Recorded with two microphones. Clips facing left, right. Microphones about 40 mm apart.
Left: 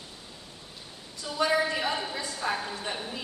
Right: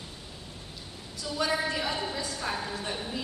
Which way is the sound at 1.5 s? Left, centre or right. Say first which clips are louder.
Left 4 dB; centre.